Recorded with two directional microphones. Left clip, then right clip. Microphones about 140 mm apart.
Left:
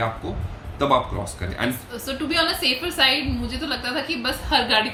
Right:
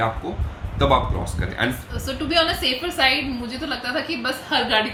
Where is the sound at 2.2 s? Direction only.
15° left (ahead or behind).